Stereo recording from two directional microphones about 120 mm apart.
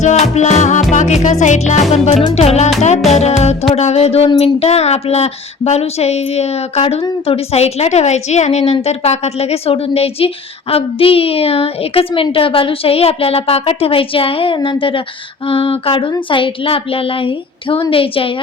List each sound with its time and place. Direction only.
0.0 s music: 70° left (ahead or behind)
2.3 s music: 65° left (ahead or behind)
3.1 s speech: 65° left (ahead or behind); by 18.3 s 50° left (ahead or behind)